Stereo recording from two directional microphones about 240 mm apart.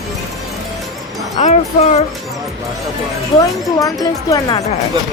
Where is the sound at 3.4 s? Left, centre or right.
Centre.